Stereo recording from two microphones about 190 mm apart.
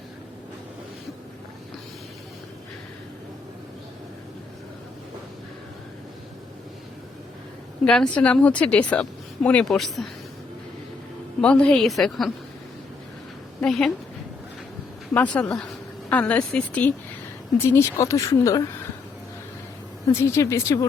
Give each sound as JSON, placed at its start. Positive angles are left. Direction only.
{"t": 7.9, "sound": "speech", "side_deg": 5}
{"t": 11.3, "sound": "speech", "side_deg": 5}
{"t": 13.7, "sound": "speech", "side_deg": 5}
{"t": 15.1, "sound": "a woman's voice", "side_deg": 5}
{"t": 20.1, "sound": "a woman's voice", "side_deg": 15}